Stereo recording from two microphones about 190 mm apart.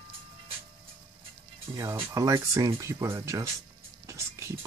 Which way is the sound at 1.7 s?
15° right (ahead or behind).